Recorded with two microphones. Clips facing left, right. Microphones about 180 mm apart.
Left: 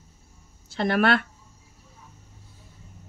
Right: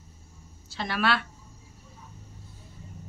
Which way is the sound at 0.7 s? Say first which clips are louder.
Left 6 dB; 55° left (ahead or behind).